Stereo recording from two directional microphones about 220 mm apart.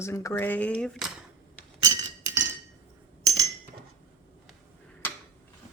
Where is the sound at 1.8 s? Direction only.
15° right (ahead or behind).